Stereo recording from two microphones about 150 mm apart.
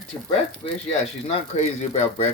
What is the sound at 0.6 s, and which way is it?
Speech, 45° left (ahead or behind).